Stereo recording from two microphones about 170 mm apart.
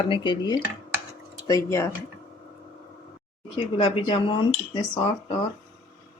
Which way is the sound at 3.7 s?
30° left (ahead or behind).